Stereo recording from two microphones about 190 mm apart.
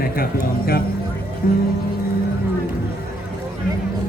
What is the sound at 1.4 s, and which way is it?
Speech, 50° left (ahead or behind).